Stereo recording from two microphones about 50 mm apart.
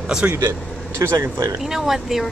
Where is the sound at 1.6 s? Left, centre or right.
Centre.